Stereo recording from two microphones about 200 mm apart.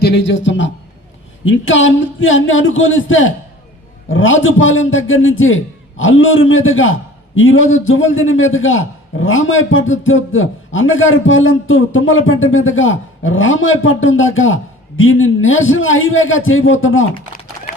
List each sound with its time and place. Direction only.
0.0 s a man's voice: 65° left (ahead or behind); by 17.1 s 80° left